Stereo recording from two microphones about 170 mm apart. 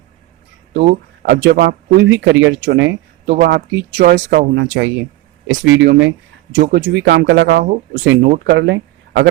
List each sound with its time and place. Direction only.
1.2 s speech: 80° right
3.3 s speech: 75° right (ahead or behind)
8.0 s speech: 90° right